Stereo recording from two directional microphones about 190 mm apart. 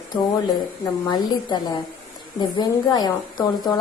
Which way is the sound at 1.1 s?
20° left (ahead or behind).